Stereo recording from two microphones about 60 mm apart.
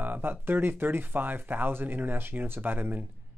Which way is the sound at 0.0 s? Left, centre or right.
Right.